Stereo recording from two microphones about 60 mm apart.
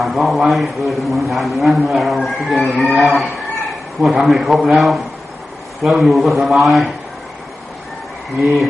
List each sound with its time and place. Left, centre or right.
0.0 s a man's voice: centre
8.4 s a man's voice: centre